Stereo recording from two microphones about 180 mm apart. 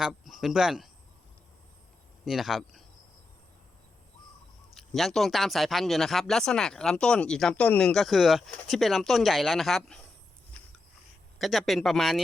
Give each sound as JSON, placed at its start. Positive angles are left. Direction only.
{"t": 0.0, "sound": "speech", "side_deg": 0}
{"t": 2.2, "sound": "speech", "side_deg": 0}
{"t": 4.7, "sound": "speech", "side_deg": 0}
{"t": 11.3, "sound": "speech", "side_deg": 0}